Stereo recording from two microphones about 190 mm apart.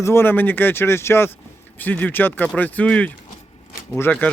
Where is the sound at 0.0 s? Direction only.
10° left (ahead or behind).